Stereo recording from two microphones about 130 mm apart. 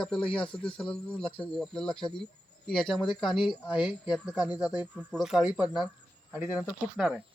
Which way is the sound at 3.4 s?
35° left (ahead or behind).